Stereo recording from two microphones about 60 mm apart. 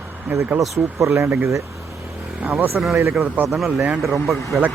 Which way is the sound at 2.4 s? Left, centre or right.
Right.